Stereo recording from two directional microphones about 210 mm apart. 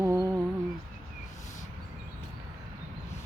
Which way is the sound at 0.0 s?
15° right (ahead or behind).